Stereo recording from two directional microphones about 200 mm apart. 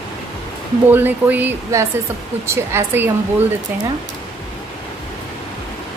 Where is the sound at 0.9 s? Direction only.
10° right (ahead or behind).